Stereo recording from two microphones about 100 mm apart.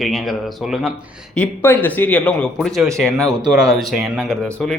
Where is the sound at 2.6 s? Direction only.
Centre (ahead or behind).